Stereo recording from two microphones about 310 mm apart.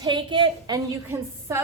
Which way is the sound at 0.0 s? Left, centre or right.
Centre.